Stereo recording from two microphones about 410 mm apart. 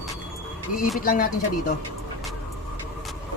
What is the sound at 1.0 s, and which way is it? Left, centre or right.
Speech, left.